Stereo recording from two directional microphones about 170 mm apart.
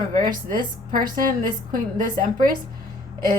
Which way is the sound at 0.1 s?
55° right (ahead or behind).